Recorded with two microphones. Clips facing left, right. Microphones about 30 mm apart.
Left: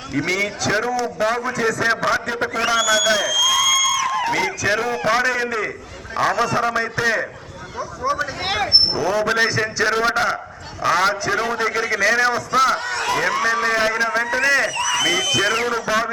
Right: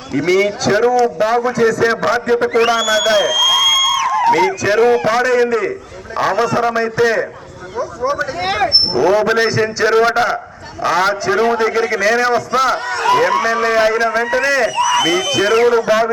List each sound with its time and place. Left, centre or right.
0.1 s a man's voice: centre
2.5 s a sound: centre
4.3 s a man's voice: centre
9.2 s a man's voice: centre